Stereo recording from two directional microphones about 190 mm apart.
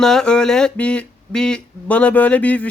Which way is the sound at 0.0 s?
5° left (ahead or behind).